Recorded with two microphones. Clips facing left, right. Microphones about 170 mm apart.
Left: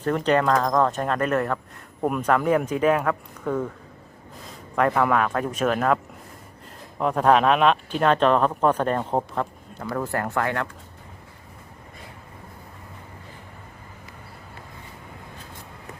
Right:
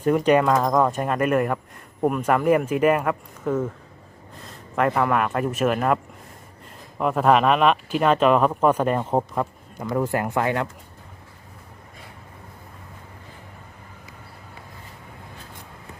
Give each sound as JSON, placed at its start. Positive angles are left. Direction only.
{"t": 0.0, "sound": "speech", "side_deg": -10}
{"t": 4.7, "sound": "speech", "side_deg": 0}
{"t": 7.0, "sound": "speech", "side_deg": -5}